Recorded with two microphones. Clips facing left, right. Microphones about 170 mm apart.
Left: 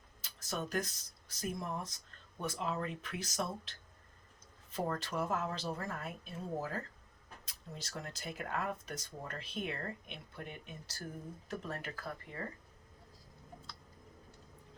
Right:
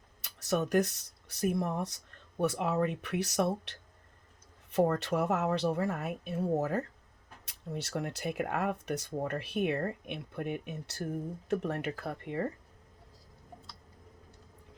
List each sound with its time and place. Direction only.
0.2 s speech: 65° right (ahead or behind)